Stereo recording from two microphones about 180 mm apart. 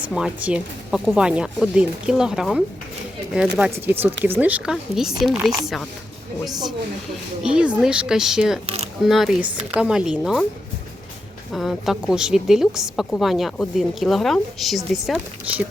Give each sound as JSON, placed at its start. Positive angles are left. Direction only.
{"t": 0.1, "sound": "a woman's voice", "side_deg": -5}
{"t": 7.4, "sound": "a woman's voice", "side_deg": -5}
{"t": 8.6, "sound": "speech", "side_deg": -35}
{"t": 9.0, "sound": "a woman's voice", "side_deg": 0}
{"t": 11.5, "sound": "a woman's voice", "side_deg": 0}